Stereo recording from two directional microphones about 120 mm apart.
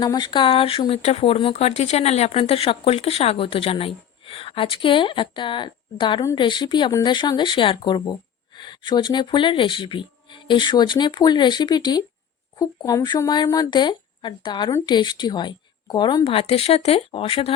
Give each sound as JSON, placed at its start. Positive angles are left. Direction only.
{"t": 0.0, "sound": "speech", "side_deg": 35}
{"t": 2.4, "sound": "speech", "side_deg": 50}